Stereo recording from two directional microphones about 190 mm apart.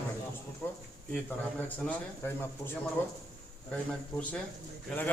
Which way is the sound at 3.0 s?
10° left (ahead or behind).